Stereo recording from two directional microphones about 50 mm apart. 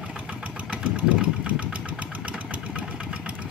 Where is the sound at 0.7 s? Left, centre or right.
Right.